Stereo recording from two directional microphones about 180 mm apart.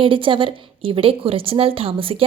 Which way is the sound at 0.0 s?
30° right (ahead or behind).